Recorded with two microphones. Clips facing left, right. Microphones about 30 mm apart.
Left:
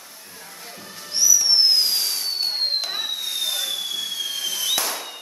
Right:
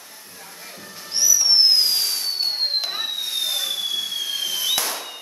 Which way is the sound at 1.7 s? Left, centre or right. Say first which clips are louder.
Right 1 dB; centre.